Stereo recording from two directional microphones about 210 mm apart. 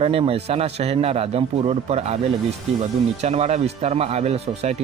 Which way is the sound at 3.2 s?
30° right (ahead or behind).